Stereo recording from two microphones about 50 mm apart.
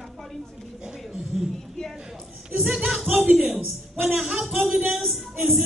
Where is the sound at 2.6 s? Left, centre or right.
Centre.